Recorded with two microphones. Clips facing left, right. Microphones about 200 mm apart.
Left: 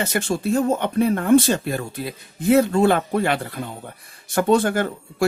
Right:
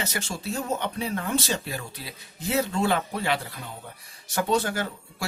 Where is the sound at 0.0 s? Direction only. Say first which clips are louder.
Left 9 dB; 55° left (ahead or behind).